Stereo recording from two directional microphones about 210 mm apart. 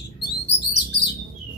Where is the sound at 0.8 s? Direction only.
55° left (ahead or behind).